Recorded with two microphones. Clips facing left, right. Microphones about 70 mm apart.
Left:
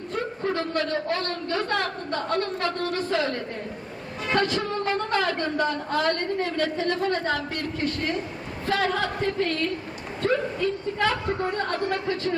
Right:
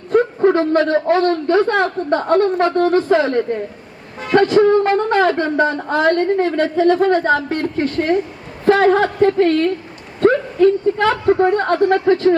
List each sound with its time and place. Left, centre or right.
0.1 s a sound: right
1.1 s a woman's voice: right
4.4 s a woman's voice: right
4.8 s a woman's voice: right